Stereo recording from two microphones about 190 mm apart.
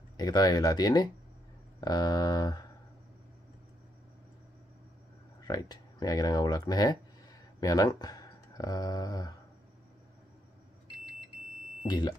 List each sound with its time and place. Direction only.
0.2 s speech: 20° left (ahead or behind)
5.4 s speech: 20° left (ahead or behind)